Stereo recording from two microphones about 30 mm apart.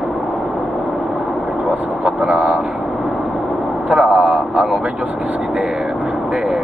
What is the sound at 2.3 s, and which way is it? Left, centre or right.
Vehicle, right.